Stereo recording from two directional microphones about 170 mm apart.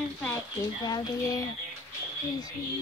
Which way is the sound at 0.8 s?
20° left (ahead or behind).